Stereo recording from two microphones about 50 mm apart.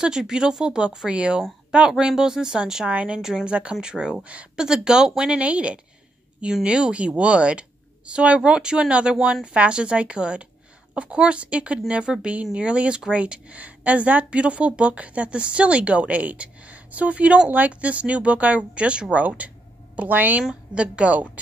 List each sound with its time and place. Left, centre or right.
0.0 s speech: centre
2.9 s speech: right
3.2 s speech: centre
4.6 s speech: centre
5.3 s speech: right
12.1 s speech: centre
12.5 s a woman's voice: right
20.7 s speech: right